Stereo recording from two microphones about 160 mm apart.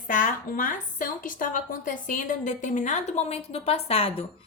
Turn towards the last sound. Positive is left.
turn(degrees=40)  # may be behind; listen again after turning